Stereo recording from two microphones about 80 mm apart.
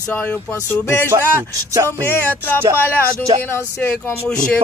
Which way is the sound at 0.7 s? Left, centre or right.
Left.